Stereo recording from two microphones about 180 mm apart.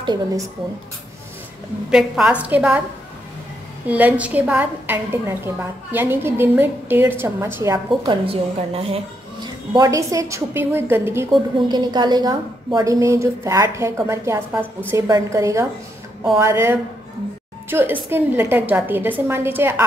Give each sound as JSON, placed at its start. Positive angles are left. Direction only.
{"t": 0.0, "sound": "speech", "side_deg": -20}
{"t": 1.9, "sound": "a woman's voice", "side_deg": -5}
{"t": 3.9, "sound": "a woman's voice", "side_deg": -10}
{"t": 11.5, "sound": "a woman's voice", "side_deg": -25}